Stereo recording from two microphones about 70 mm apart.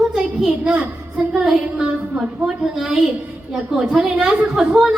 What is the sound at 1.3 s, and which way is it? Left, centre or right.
A woman's voice, centre.